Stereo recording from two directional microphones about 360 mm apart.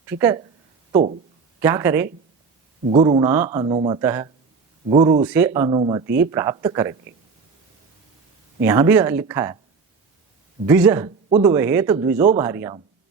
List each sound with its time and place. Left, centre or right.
0.0 s speech: centre
1.6 s speech: centre
8.6 s speech: centre
10.7 s speech: centre
11.3 s speech: centre
11.5 s speech: centre